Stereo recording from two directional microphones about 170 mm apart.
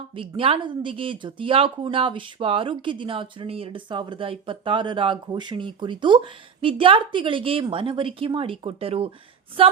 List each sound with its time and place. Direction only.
0.2 s a woman's voice: 30° right (ahead or behind)